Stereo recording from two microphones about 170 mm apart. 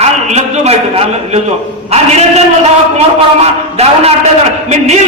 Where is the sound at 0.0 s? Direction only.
40° right (ahead or behind).